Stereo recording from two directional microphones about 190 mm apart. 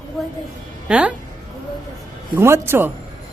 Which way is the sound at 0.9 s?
5° right (ahead or behind).